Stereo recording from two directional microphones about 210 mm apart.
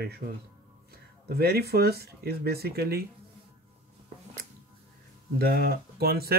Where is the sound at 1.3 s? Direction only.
50° right (ahead or behind).